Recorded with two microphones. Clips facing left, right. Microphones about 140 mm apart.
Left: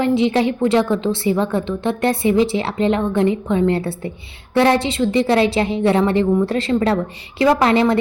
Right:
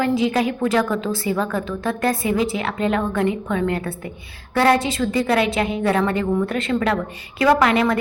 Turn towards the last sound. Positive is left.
turn(degrees=30)  # may be behind; listen again after turning